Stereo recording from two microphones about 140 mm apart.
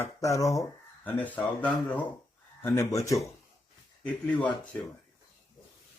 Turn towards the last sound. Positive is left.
turn(degrees=10)  # may be behind; listen again after turning